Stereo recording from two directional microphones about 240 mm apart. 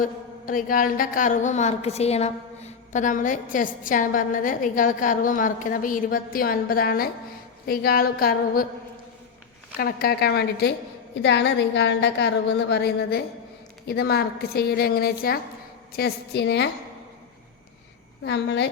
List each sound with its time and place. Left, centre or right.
0.0 s a woman's voice: left
9.7 s a woman's voice: left
18.3 s a woman's voice: left